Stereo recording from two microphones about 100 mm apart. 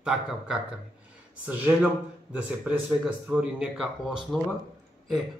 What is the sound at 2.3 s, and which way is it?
Speech, 15° right (ahead or behind).